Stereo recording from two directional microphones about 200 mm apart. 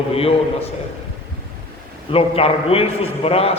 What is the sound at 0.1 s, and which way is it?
Speech, 30° left (ahead or behind).